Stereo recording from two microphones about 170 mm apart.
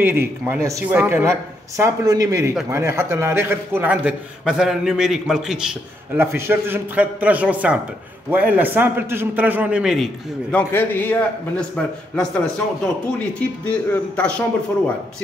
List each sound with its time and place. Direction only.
0.0 s a man's voice: 15° right (ahead or behind)
6.1 s a man's voice: 15° right (ahead or behind)
10.5 s a man's voice: 10° left (ahead or behind)